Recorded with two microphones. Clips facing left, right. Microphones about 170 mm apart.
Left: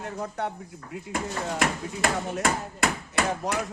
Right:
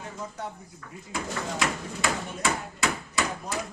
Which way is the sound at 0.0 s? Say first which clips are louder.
Left 5 dB; 60° left (ahead or behind).